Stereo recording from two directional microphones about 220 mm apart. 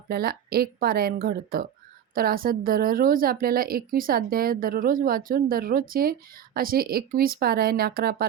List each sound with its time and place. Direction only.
0.1 s a woman's voice: 45° right (ahead or behind)